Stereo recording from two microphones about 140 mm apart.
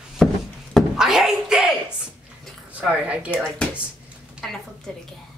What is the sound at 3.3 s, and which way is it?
A woman's voice, 5° left (ahead or behind).